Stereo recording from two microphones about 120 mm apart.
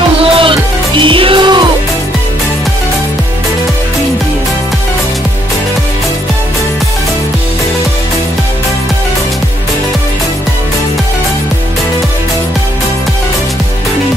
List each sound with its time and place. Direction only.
0.2 s music: 45° right (ahead or behind)